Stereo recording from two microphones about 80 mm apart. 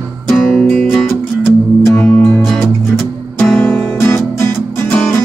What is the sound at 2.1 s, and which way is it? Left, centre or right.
Music, centre.